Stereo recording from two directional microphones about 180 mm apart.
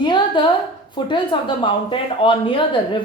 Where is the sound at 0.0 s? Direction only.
25° left (ahead or behind).